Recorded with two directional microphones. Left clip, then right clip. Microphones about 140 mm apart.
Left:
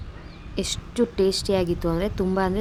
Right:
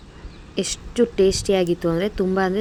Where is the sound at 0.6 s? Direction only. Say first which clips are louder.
Right 4 dB; 20° right (ahead or behind).